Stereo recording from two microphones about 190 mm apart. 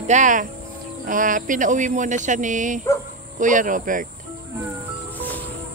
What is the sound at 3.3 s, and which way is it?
Speech, 45° right (ahead or behind).